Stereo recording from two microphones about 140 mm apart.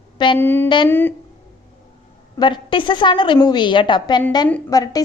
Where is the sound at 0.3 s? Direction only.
15° left (ahead or behind).